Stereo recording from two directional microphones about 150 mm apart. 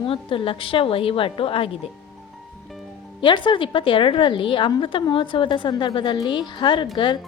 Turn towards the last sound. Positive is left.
turn(degrees=30)  # may be behind; listen again after turning